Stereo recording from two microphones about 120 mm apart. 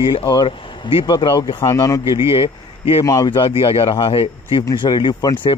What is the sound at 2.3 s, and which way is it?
Speech, 50° left (ahead or behind).